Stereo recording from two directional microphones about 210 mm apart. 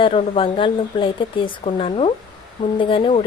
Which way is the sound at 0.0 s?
25° left (ahead or behind).